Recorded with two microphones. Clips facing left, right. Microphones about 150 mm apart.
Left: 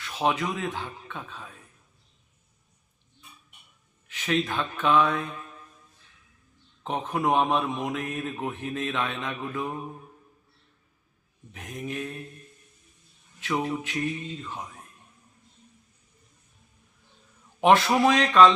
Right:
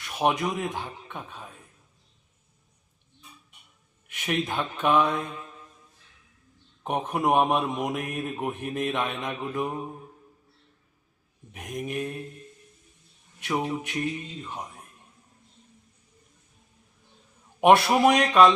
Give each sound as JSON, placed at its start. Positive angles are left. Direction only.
{"t": 0.0, "sound": "speech", "side_deg": -15}
{"t": 4.1, "sound": "speech", "side_deg": -15}
{"t": 6.8, "sound": "speech", "side_deg": -15}
{"t": 11.5, "sound": "speech", "side_deg": -10}
{"t": 13.5, "sound": "speech", "side_deg": -15}
{"t": 17.6, "sound": "speech", "side_deg": -10}